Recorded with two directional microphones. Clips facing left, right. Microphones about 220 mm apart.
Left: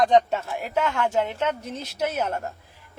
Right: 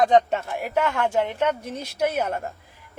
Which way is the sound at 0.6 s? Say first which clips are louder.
Right 1 dB; 10° right (ahead or behind).